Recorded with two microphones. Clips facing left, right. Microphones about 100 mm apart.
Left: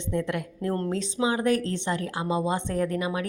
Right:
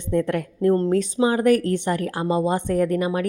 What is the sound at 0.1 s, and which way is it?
Speech, 45° right (ahead or behind).